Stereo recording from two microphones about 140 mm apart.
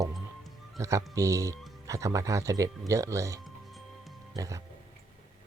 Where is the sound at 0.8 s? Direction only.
20° right (ahead or behind).